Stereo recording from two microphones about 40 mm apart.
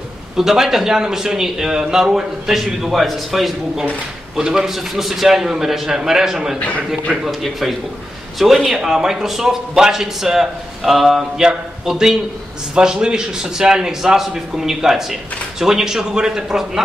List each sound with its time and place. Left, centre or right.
0.4 s a man's voice: centre
4.4 s a man's voice: centre